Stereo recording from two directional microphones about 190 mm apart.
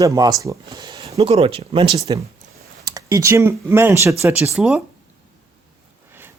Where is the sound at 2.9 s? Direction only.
15° right (ahead or behind).